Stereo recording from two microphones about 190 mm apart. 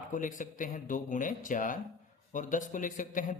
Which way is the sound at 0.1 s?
45° left (ahead or behind).